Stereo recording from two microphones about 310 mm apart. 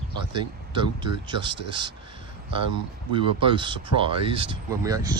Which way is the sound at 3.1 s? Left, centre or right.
Centre.